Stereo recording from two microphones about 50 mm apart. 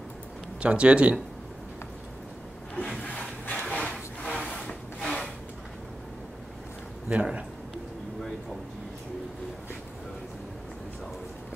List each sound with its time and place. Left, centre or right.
0.6 s speech: right
3.0 s a sound: left
4.2 s wood: centre
7.1 s speech: right